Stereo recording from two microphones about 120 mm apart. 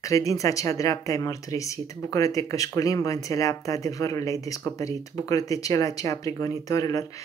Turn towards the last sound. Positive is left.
turn(degrees=30)  # may be behind; listen again after turning